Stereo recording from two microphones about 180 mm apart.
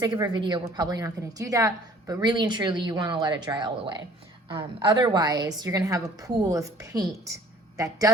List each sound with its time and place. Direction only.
0.0 s a woman's voice: 25° right (ahead or behind)